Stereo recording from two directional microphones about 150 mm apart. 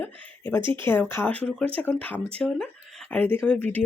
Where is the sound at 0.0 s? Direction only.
15° left (ahead or behind).